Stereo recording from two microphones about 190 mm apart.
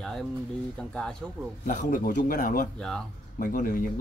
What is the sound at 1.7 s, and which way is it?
A man's voice, 45° left (ahead or behind).